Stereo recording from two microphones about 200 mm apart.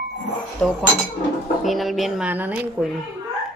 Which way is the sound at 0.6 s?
5° left (ahead or behind).